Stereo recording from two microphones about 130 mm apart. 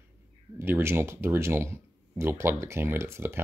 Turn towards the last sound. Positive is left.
turn(degrees=-20)  # may be behind; listen again after turning